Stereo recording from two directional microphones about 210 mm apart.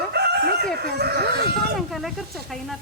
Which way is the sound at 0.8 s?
50° right (ahead or behind).